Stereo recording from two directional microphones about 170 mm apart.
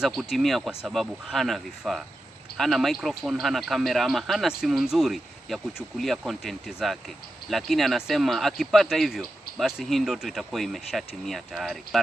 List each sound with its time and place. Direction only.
0.0 s speech: centre (ahead or behind)